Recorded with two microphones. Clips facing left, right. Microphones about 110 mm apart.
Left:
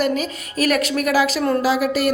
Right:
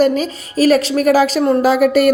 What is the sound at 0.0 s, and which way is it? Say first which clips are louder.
Speech: right 6 dB; 35° right (ahead or behind).